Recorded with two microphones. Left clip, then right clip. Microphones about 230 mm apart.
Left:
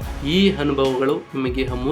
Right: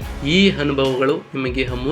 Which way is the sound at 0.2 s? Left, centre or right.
Centre.